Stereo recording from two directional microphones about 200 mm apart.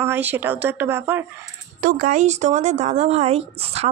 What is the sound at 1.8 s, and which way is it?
A woman's voice, 40° right (ahead or behind).